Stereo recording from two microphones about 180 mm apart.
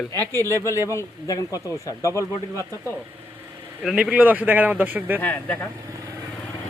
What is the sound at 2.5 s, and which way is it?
Speech, 15° right (ahead or behind).